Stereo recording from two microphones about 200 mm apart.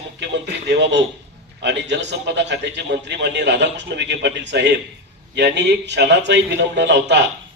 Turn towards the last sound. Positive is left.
turn(degrees=-60)  # may be behind; listen again after turning